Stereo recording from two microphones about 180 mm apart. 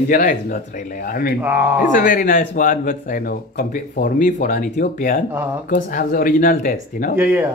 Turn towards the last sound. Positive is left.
turn(degrees=-10)  # may be behind; listen again after turning